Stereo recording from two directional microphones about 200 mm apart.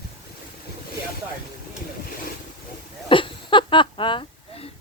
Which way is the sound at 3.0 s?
25° left (ahead or behind).